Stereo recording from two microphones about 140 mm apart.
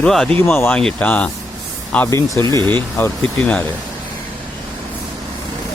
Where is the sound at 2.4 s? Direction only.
30° right (ahead or behind).